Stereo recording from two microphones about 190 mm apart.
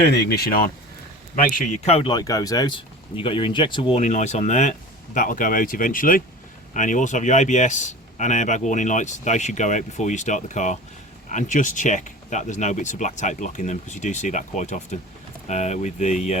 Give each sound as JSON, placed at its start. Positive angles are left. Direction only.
{"t": 0.0, "sound": "speech", "side_deg": 55}
{"t": 2.0, "sound": "speech", "side_deg": 20}